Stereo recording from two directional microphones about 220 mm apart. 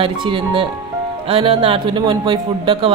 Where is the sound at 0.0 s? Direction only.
20° right (ahead or behind).